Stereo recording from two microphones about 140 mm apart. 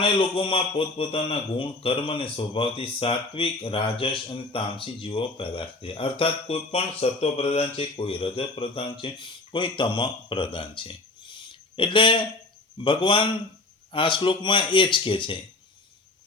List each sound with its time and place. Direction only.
0.0 s a man's voice: 40° left (ahead or behind)
11.3 s a sound: 35° left (ahead or behind)
12.8 s a man's voice: 35° left (ahead or behind)